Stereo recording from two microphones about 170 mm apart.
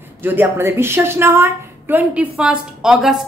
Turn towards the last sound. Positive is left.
turn(degrees=-5)  # may be behind; listen again after turning